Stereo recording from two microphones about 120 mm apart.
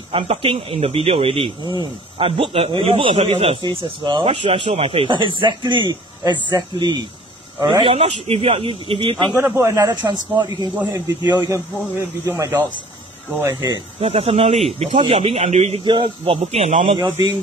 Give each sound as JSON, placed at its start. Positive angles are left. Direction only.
{"t": 0.1, "sound": "speech", "side_deg": -50}
{"t": 7.9, "sound": "speech", "side_deg": -60}
{"t": 9.4, "sound": "speech", "side_deg": -20}
{"t": 9.8, "sound": "speech", "side_deg": -35}
{"t": 11.4, "sound": "speech", "side_deg": -25}
{"t": 13.9, "sound": "speech", "side_deg": -55}
{"t": 15.8, "sound": "speech", "side_deg": -45}